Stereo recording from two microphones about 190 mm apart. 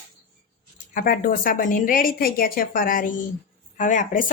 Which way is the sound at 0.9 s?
50° left (ahead or behind).